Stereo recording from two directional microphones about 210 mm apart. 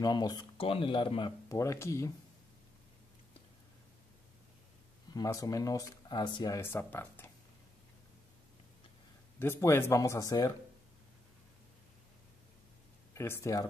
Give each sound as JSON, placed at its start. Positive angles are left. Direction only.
{"t": 0.0, "sound": "speech", "side_deg": 20}
{"t": 5.1, "sound": "speech", "side_deg": 15}
{"t": 9.4, "sound": "speech", "side_deg": 10}
{"t": 13.1, "sound": "speech", "side_deg": 15}